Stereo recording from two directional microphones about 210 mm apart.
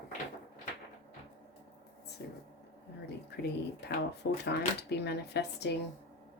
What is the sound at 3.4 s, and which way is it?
Speech, 50° left (ahead or behind).